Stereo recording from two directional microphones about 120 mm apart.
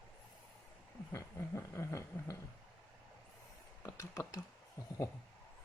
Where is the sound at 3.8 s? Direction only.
25° left (ahead or behind).